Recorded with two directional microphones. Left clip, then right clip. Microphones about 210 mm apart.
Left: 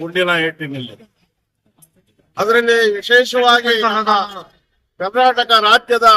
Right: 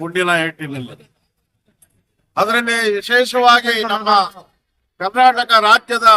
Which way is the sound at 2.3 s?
15° right (ahead or behind).